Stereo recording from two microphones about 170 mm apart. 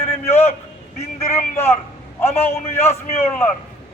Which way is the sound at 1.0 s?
40° left (ahead or behind).